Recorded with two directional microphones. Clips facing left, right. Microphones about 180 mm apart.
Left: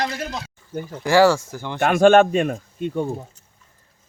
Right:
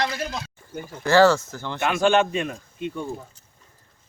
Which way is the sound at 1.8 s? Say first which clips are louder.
Left 6 dB; 55° left (ahead or behind).